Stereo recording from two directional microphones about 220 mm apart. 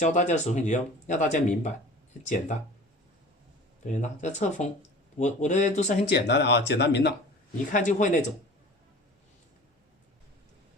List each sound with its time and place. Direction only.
0.0 s speech: 35° left (ahead or behind)
3.8 s speech: 35° left (ahead or behind)
6.1 s speech: 50° left (ahead or behind)
7.7 s speech: 35° left (ahead or behind)